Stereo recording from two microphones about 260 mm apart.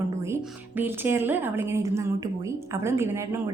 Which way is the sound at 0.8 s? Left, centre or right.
Centre.